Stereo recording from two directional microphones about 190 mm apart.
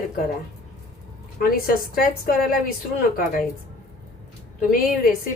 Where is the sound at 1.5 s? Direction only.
50° left (ahead or behind).